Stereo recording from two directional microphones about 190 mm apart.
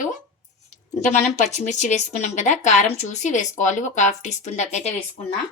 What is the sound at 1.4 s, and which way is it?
Speech, 40° left (ahead or behind).